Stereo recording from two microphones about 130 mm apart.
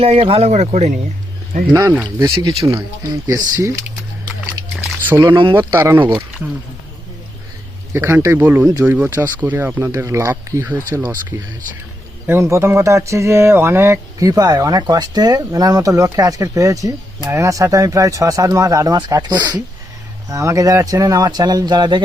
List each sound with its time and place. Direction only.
0.0 s speech: 50° right (ahead or behind)
2.1 s speech: 30° right (ahead or behind)
5.0 s speech: 15° right (ahead or behind)
5.3 s speech: 40° right (ahead or behind)
5.5 s speech: 15° right (ahead or behind)
7.9 s speech: 20° right (ahead or behind)
12.2 s speech: 20° right (ahead or behind); by 22.0 s 35° right (ahead or behind)